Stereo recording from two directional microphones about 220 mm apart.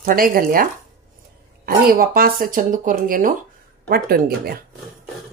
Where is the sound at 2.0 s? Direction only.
40° right (ahead or behind).